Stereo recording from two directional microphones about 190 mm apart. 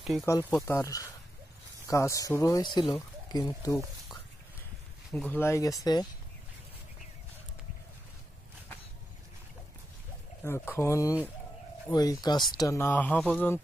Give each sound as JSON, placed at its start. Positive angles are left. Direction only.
{"t": 0.2, "sound": "speech", "side_deg": 10}
{"t": 5.1, "sound": "speech", "side_deg": 5}
{"t": 10.4, "sound": "speech", "side_deg": 15}